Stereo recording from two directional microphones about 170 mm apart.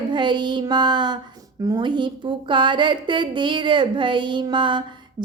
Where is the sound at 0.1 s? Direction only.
25° right (ahead or behind).